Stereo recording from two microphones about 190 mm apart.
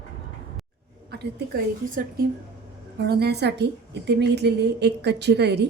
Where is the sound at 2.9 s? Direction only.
60° right (ahead or behind).